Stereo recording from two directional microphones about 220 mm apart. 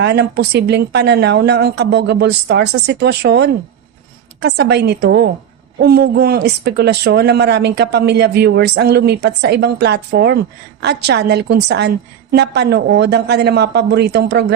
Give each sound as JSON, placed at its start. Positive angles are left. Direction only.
{"t": 0.0, "sound": "speech", "side_deg": -50}